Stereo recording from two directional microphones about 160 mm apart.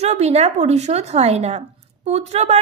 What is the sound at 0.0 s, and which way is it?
A woman's voice, 40° right (ahead or behind).